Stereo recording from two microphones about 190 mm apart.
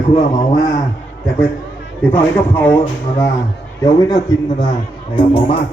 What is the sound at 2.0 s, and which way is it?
A man's voice, 10° left (ahead or behind).